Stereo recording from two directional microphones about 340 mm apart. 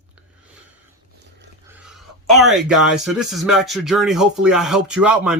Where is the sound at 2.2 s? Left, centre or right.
Centre.